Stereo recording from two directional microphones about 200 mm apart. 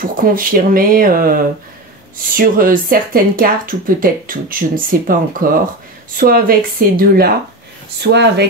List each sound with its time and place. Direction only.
0.0 s speech: 45° right (ahead or behind)